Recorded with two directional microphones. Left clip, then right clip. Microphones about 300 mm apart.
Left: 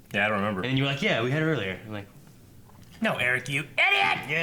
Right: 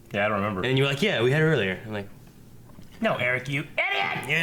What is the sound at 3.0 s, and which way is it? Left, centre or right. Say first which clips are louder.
Speech: right 1 dB; right.